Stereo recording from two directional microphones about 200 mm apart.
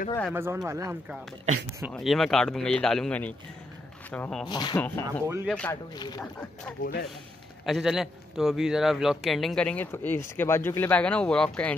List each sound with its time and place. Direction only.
0.3 s speech: 10° right (ahead or behind)
1.8 s a man's voice: centre (ahead or behind)
4.5 s speech: 20° left (ahead or behind)
4.8 s speech: 10° left (ahead or behind)
5.2 s speech: 15° right (ahead or behind)
5.5 s a man's voice: 5° left (ahead or behind)
5.9 s speech: 20° left (ahead or behind)
6.8 s speech: 50° left (ahead or behind)
7.6 s a man's voice: centre (ahead or behind)